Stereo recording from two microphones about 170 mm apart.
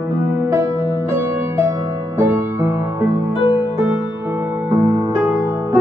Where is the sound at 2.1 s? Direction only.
15° right (ahead or behind).